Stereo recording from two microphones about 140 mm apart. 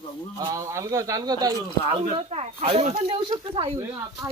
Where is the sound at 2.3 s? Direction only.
45° right (ahead or behind).